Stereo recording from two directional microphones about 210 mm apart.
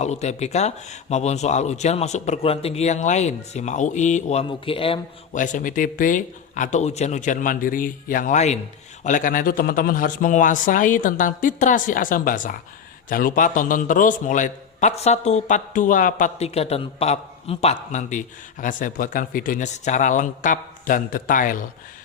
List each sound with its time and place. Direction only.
0.0 s speech: 30° left (ahead or behind)